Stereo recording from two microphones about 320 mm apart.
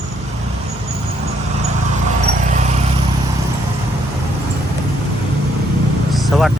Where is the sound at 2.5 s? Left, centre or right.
Right.